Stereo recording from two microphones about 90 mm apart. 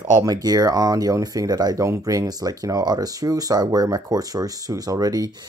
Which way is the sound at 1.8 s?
35° right (ahead or behind).